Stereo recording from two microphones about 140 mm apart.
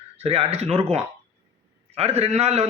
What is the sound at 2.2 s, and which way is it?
Speech, 50° right (ahead or behind).